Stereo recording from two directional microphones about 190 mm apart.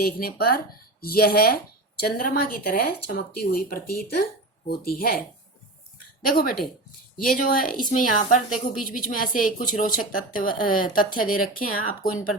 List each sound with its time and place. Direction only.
0.0 s speech: 50° left (ahead or behind)
6.2 s speech: 50° left (ahead or behind)